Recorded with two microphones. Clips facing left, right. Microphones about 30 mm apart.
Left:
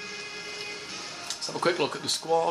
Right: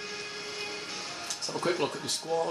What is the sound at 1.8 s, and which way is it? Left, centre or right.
Speech, left.